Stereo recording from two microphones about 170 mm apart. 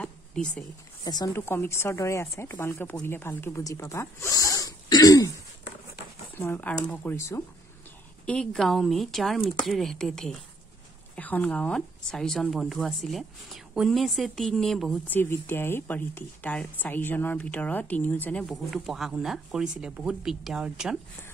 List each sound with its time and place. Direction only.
0.0 s a sound: 5° left (ahead or behind)
1.0 s speech: 20° left (ahead or behind)
6.3 s speech: 15° left (ahead or behind)
8.3 s speech: 5° left (ahead or behind)